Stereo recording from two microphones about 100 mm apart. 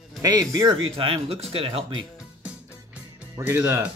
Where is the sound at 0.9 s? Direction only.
65° right (ahead or behind).